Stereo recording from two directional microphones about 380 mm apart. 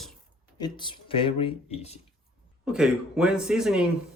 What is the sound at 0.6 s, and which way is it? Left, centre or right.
Speech, centre.